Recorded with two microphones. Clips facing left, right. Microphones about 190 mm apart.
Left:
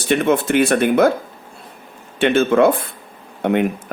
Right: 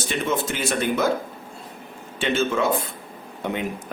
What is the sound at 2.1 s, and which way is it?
Speech, 60° left (ahead or behind).